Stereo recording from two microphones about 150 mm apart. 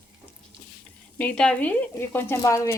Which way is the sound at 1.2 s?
10° left (ahead or behind).